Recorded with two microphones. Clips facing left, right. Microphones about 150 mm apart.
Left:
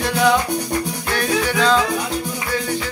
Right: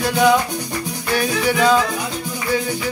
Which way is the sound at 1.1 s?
10° right (ahead or behind).